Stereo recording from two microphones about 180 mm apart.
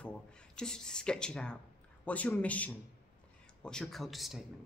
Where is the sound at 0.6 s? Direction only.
5° left (ahead or behind).